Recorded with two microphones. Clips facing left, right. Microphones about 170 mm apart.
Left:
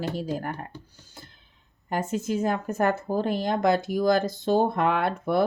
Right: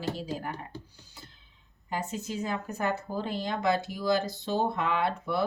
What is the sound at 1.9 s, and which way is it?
Speech, 50° left (ahead or behind).